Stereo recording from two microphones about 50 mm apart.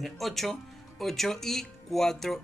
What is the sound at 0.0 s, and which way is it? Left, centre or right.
Speech, centre.